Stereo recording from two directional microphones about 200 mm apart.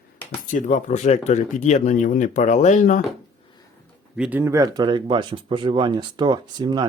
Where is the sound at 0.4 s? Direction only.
40° left (ahead or behind).